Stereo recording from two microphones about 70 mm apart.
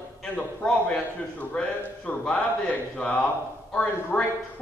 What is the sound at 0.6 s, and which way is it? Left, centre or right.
Speech, centre.